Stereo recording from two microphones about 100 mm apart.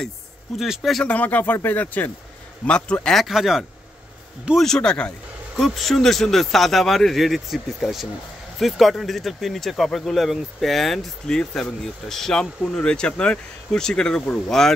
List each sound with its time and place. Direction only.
0.6 s speech: centre (ahead or behind)
1.0 s speech: 15° left (ahead or behind)